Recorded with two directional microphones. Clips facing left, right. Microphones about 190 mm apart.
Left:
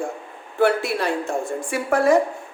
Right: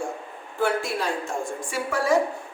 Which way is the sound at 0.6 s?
65° left (ahead or behind).